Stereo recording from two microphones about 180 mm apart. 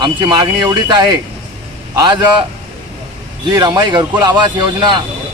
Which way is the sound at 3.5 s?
20° right (ahead or behind).